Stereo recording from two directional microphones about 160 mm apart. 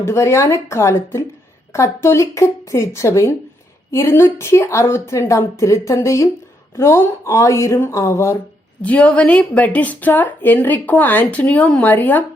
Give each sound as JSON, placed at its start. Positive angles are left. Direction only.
{"t": 0.0, "sound": "a woman's voice", "side_deg": 15}